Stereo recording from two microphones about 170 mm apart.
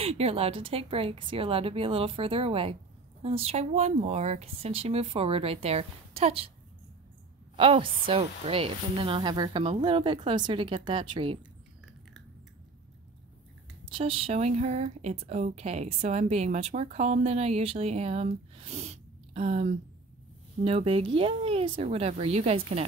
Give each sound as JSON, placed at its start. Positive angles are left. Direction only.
{"t": 0.0, "sound": "speech", "side_deg": -35}
{"t": 7.5, "sound": "speech", "side_deg": -30}
{"t": 13.8, "sound": "speech", "side_deg": -30}